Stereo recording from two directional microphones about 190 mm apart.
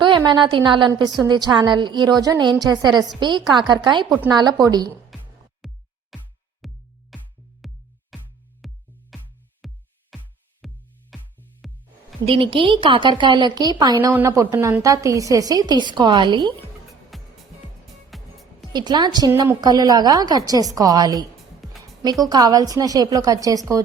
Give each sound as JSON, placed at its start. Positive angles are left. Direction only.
{"t": 0.0, "sound": "a woman's voice", "side_deg": -25}
{"t": 5.1, "sound": "music", "side_deg": 0}
{"t": 12.2, "sound": "a woman's voice", "side_deg": -30}
{"t": 17.1, "sound": "music", "side_deg": 0}
{"t": 18.7, "sound": "a woman's voice", "side_deg": -20}